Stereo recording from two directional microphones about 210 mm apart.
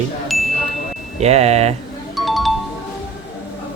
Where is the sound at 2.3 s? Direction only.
Centre (ahead or behind).